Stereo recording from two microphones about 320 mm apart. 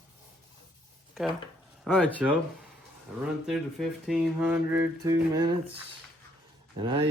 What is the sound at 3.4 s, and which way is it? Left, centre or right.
Speech, centre.